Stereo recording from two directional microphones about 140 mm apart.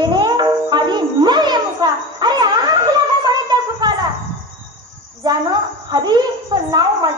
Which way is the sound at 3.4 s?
30° right (ahead or behind).